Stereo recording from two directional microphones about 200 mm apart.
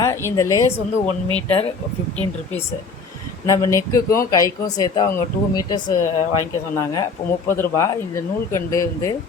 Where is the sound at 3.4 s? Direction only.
15° left (ahead or behind).